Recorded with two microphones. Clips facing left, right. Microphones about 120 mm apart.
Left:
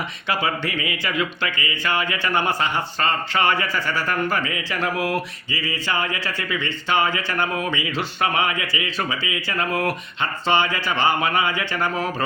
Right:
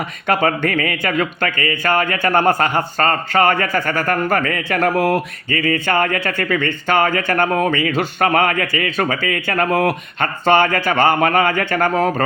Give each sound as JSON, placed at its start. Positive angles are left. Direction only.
{"t": 0.3, "sound": "speech", "side_deg": -50}